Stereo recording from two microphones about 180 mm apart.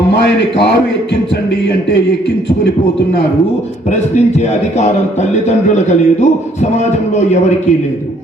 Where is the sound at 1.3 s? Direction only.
70° left (ahead or behind).